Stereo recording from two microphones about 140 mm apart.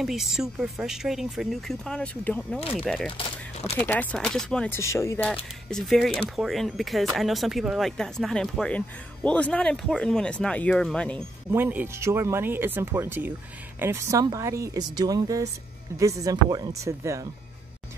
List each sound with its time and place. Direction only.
0.0 s speech: centre (ahead or behind)
3.2 s speech: 45° left (ahead or behind)
3.7 s speech: 15° left (ahead or behind)
4.6 s speech: 20° left (ahead or behind)
5.7 s speech: centre (ahead or behind)
11.5 s speech: 15° right (ahead or behind)